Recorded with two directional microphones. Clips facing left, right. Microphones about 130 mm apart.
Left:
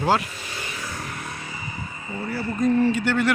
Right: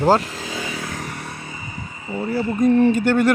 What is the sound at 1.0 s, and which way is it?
Vehicle, 40° right (ahead or behind).